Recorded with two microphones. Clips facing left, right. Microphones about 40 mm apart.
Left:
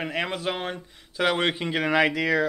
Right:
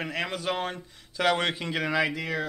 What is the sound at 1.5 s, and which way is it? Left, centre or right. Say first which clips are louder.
Speech: left 4 dB; left.